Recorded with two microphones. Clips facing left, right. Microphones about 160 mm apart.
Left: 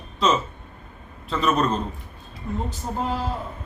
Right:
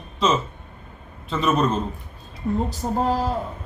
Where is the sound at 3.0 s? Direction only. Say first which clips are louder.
Right 5 dB; 40° right (ahead or behind).